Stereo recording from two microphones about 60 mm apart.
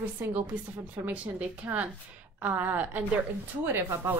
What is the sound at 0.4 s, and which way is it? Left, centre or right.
A woman's voice, right.